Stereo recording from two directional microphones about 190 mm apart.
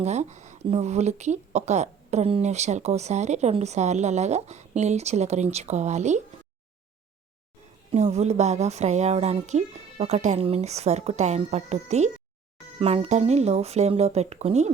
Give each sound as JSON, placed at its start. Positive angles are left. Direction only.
{"t": 0.0, "sound": "speech", "side_deg": -35}
{"t": 7.9, "sound": "speech", "side_deg": -35}